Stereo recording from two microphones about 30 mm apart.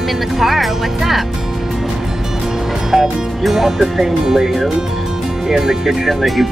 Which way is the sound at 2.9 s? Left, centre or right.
Centre.